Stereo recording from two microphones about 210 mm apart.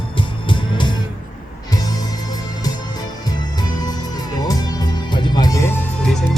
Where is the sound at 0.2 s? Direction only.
25° left (ahead or behind).